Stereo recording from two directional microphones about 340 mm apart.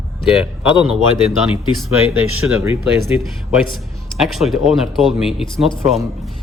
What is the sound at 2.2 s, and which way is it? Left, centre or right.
Speech, right.